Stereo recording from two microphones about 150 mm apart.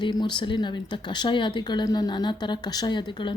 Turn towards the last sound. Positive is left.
turn(degrees=30)  # may be behind; listen again after turning